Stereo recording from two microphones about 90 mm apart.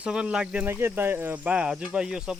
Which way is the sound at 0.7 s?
25° right (ahead or behind).